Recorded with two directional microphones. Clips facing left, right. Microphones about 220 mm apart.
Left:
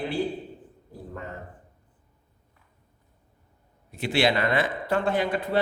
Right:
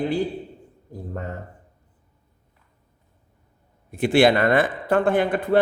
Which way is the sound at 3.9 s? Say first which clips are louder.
Right 7 dB; 50° right (ahead or behind).